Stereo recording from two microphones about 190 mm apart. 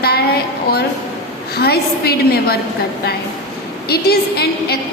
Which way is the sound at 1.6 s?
55° left (ahead or behind).